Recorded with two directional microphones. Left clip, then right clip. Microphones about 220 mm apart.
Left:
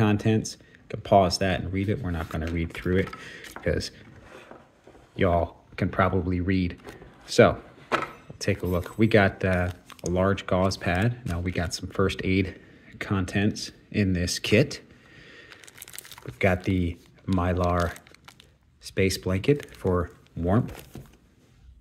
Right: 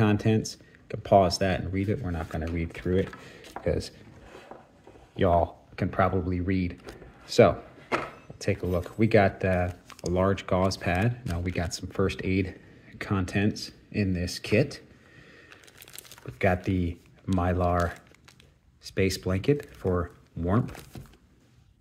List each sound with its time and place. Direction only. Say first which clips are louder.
0.0 s speech: left 1 dB; 5° left (ahead or behind)
5.1 s speech: right 1 dB; 5° left (ahead or behind)
15.3 s a sound: left 5 dB; 20° left (ahead or behind)
16.3 s speech: left 2 dB; 10° left (ahead or behind)